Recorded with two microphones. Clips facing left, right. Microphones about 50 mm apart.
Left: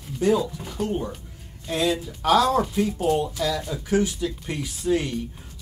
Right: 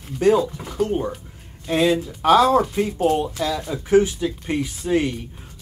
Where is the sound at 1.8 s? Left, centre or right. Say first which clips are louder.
Right 5 dB; right.